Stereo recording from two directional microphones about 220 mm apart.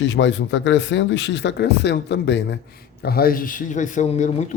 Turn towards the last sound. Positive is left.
turn(degrees=30)  # may be behind; listen again after turning